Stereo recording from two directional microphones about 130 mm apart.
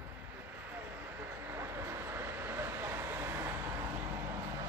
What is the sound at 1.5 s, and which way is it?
Vehicle, 20° right (ahead or behind).